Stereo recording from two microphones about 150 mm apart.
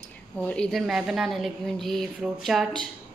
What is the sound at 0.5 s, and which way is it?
A woman's voice, 5° left (ahead or behind).